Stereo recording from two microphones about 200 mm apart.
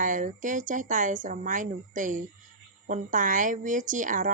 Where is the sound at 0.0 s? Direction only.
40° right (ahead or behind).